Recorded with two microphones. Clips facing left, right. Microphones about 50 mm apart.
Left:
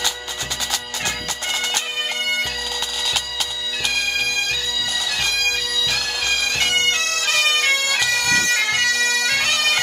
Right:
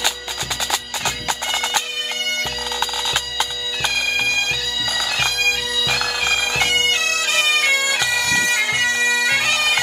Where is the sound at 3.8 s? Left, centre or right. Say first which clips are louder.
Right 2 dB; right.